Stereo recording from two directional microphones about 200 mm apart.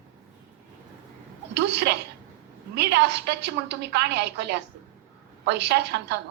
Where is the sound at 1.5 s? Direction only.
55° right (ahead or behind).